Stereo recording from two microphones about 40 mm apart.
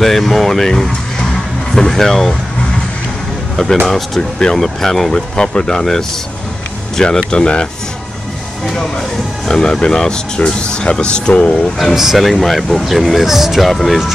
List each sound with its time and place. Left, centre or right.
0.0 s speech: centre
3.5 s speech: centre
5.4 s speech: left
9.5 s speech: centre
11.9 s speech: centre
12.2 s speech: centre
13.7 s speech: centre